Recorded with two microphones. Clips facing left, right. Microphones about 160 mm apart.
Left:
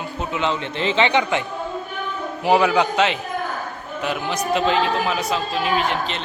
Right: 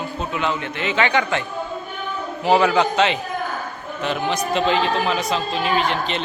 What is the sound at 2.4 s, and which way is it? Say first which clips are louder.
A man's voice: even; 10° left (ahead or behind).